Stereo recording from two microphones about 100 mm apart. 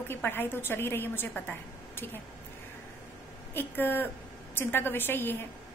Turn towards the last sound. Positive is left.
turn(degrees=20)  # may be behind; listen again after turning